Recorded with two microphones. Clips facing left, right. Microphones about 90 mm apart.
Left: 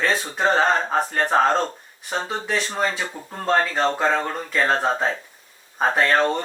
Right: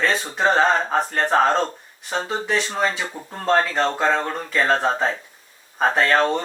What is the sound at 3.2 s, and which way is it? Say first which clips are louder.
Speech: right 1 dB; 15° right (ahead or behind).